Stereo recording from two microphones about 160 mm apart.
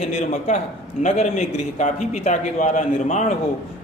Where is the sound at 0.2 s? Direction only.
45° left (ahead or behind).